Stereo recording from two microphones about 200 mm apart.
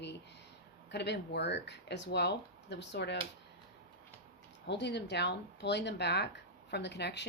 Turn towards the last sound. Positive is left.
turn(degrees=60)  # may be behind; listen again after turning